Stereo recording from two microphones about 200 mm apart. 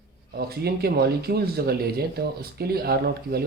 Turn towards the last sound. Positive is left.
turn(degrees=-50)  # may be behind; listen again after turning